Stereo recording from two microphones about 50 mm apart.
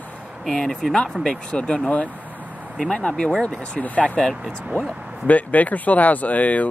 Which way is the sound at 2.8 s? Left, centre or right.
Centre.